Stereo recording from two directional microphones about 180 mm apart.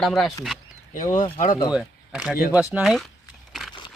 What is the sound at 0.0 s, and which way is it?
Speech, centre (ahead or behind).